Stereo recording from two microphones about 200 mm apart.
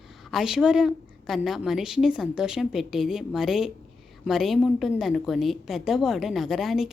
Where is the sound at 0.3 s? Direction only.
Centre (ahead or behind).